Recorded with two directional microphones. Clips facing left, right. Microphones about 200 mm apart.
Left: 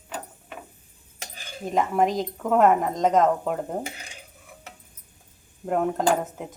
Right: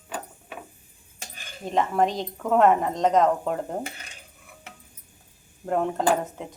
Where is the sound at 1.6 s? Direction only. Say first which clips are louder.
Left 1 dB; centre (ahead or behind).